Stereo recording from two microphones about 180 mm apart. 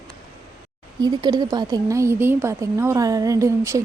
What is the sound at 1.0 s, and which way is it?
A woman's voice, 25° right (ahead or behind).